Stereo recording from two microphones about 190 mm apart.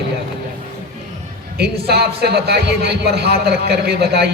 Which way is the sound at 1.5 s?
60° right (ahead or behind).